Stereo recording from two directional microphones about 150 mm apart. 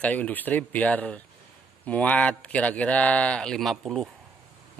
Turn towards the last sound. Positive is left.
turn(degrees=0)  # may be behind; listen again after turning